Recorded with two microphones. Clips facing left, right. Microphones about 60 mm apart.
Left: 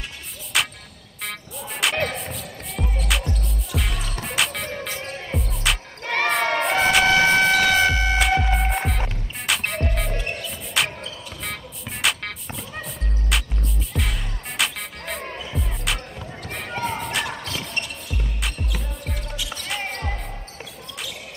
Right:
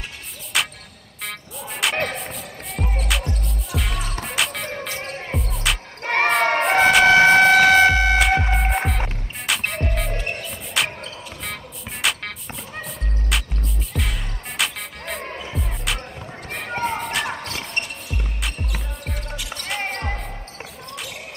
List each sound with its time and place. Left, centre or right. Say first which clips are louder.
0.5 s music: even; centre
2.8 s music: right 1 dB; right
3.1 s music: even; centre
6.0 s crowd: right 3 dB; right
6.6 s emergency vehicle: right 6 dB; right
7.1 s music: right 5 dB; right
8.5 s music: right 2 dB; centre
12.0 s music: even; centre
13.3 s music: even; centre
16.9 s basketball bounce: right 1 dB; centre
17.3 s music: right 1 dB; right
19.3 s music: even; right
19.8 s music: right 2 dB; right